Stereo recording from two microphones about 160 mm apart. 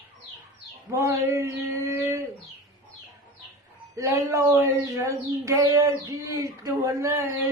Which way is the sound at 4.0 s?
15° right (ahead or behind).